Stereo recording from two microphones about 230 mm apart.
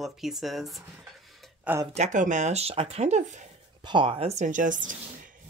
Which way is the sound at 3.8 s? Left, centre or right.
Right.